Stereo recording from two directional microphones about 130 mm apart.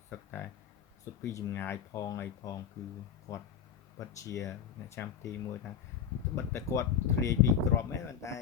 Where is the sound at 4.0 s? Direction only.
25° left (ahead or behind).